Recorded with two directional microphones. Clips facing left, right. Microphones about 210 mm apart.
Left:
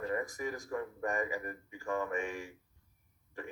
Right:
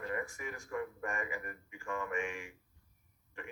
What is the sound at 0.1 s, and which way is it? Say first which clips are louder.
Speech: left 4 dB; 35° left (ahead or behind).